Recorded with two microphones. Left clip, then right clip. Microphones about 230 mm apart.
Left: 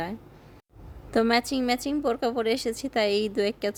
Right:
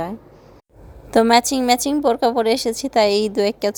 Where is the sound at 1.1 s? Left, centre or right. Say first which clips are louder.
Right 9 dB; centre.